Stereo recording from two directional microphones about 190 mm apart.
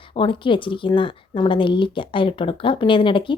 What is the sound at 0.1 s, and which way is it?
Speech, 25° left (ahead or behind).